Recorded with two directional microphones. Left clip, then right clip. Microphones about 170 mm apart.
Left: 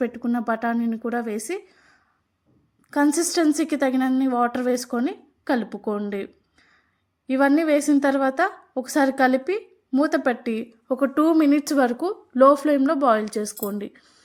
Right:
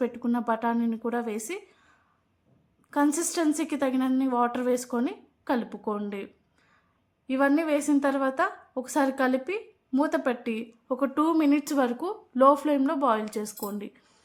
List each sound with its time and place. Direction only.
0.0 s a woman's voice: 10° left (ahead or behind)